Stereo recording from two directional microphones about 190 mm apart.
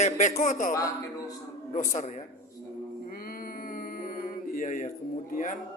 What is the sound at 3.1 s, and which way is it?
Mantra, 50° left (ahead or behind).